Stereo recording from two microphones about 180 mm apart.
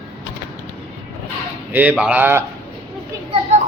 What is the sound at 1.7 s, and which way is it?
Speech, 10° right (ahead or behind).